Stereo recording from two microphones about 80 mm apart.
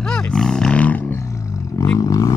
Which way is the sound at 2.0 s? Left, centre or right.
Left.